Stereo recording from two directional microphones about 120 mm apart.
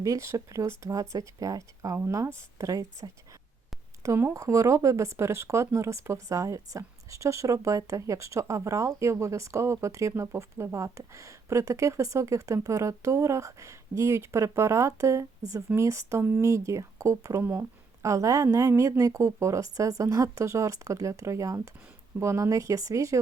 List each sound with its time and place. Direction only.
0.0 s speech: 25° right (ahead or behind)